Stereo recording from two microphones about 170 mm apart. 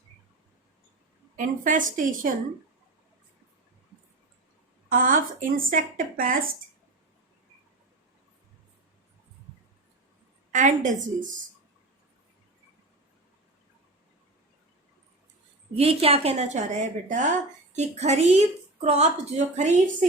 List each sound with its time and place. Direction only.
1.4 s a woman's voice: 50° right (ahead or behind)
4.9 s speech: 55° right (ahead or behind)
10.5 s a woman's voice: 50° right (ahead or behind)
15.7 s a woman's voice: 35° right (ahead or behind)